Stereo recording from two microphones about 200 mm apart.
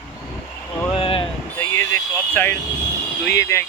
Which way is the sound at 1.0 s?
25° left (ahead or behind).